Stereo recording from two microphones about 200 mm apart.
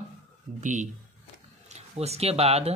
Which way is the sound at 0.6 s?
40° right (ahead or behind).